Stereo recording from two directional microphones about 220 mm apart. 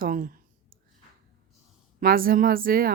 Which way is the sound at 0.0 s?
40° right (ahead or behind).